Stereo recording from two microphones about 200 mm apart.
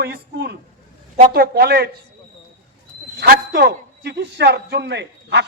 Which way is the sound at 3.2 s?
55° right (ahead or behind).